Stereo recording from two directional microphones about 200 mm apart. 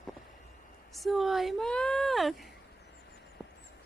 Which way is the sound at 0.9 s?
Centre (ahead or behind).